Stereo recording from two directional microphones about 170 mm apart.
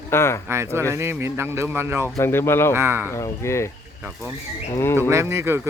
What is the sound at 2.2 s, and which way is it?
Speech, 15° left (ahead or behind).